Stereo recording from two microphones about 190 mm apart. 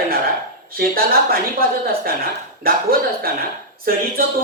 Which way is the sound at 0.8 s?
50° right (ahead or behind).